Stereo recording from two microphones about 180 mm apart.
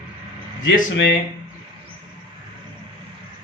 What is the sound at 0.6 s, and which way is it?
Speech, 85° left.